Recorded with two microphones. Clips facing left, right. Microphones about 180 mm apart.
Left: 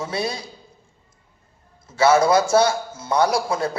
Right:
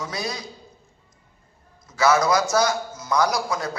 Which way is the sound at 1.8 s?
30° left (ahead or behind).